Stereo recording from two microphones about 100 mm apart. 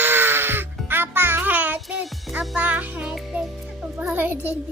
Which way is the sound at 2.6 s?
15° right (ahead or behind).